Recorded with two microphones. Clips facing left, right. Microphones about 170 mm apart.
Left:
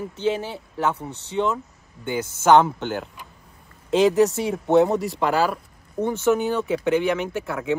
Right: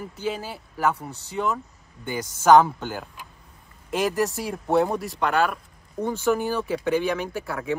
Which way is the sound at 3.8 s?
25° left (ahead or behind).